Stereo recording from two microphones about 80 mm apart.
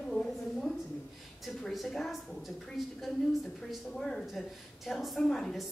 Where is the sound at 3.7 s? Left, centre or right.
Centre.